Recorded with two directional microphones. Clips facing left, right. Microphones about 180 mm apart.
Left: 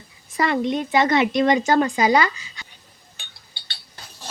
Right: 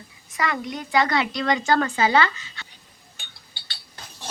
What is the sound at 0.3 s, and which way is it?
Speech, 30° left (ahead or behind).